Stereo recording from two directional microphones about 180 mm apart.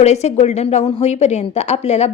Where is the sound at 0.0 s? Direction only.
35° left (ahead or behind).